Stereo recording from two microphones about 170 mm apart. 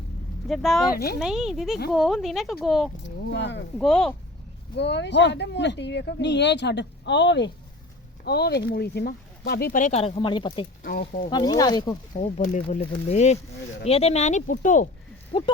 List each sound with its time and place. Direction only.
0.4 s speech: centre (ahead or behind)
3.0 s speech: 90° left
3.8 s speech: 5° left (ahead or behind)
4.8 s speech: 90° left
8.2 s speech: 70° left (ahead or behind); by 10.7 s 30° left (ahead or behind)
10.8 s speech: 55° left (ahead or behind)
11.3 s speech: 25° left (ahead or behind)
12.2 s speech: 45° left (ahead or behind)
15.3 s speech: 35° left (ahead or behind)